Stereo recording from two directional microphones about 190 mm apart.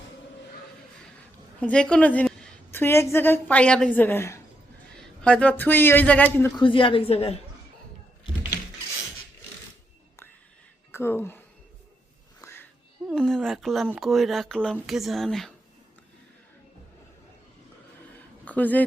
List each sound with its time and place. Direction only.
1.6 s a woman's voice: 5° left (ahead or behind)
6.6 s a woman's voice: 25° left (ahead or behind)
10.9 s speech: 15° left (ahead or behind)
12.4 s a sound: 15° left (ahead or behind)
13.1 s speech: centre (ahead or behind)
18.4 s a woman's voice: 10° left (ahead or behind)